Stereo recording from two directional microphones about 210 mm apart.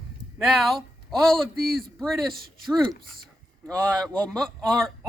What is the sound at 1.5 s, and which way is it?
Speech, 45° right (ahead or behind).